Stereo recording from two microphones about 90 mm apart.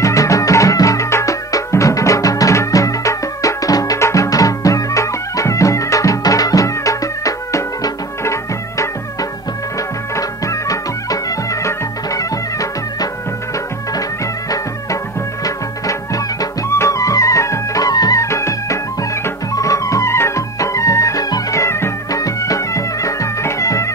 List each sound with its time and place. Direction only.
0.0 s music: 35° left (ahead or behind)
10.1 s music: 40° left (ahead or behind)
15.4 s music: 40° left (ahead or behind)